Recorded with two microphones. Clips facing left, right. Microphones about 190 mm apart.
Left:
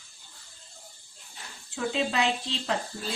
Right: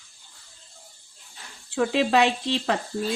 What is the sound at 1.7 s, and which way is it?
Speech, 65° right (ahead or behind).